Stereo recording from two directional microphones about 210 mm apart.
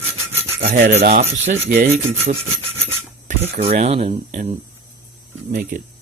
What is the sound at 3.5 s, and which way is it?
Speech, 30° right (ahead or behind).